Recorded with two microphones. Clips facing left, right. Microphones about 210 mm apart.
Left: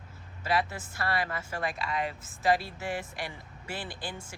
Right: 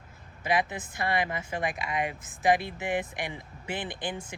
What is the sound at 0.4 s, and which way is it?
Speech, 15° right (ahead or behind).